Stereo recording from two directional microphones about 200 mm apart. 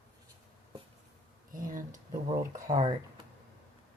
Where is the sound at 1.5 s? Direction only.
40° right (ahead or behind).